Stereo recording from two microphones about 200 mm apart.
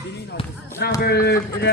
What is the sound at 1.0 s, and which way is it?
Speech, 50° left (ahead or behind).